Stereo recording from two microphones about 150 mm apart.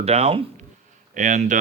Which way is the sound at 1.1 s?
55° right (ahead or behind).